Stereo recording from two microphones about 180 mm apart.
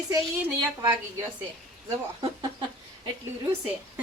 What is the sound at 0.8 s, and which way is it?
Speech, 15° right (ahead or behind).